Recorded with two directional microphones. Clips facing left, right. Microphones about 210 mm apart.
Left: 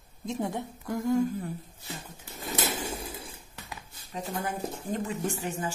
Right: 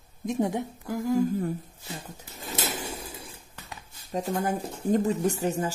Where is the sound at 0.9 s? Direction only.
Centre (ahead or behind).